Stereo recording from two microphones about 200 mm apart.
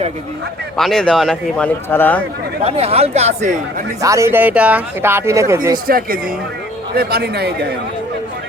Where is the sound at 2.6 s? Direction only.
30° right (ahead or behind).